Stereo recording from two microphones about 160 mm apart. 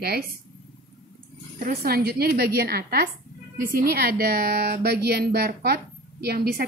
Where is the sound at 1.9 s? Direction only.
80° right.